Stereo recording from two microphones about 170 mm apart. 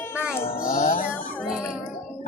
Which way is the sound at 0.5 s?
60° left (ahead or behind).